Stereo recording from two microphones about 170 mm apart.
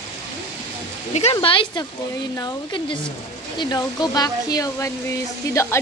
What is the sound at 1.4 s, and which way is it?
A woman's voice, 30° left (ahead or behind).